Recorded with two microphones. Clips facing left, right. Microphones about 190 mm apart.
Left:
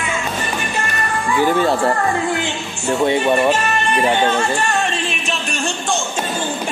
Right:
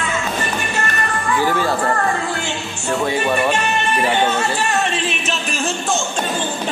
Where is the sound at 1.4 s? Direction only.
20° left (ahead or behind).